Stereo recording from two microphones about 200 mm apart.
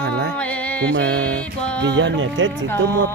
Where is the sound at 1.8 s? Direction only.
60° right (ahead or behind).